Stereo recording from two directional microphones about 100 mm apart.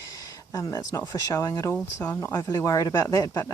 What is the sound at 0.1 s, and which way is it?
Speech, 35° left (ahead or behind).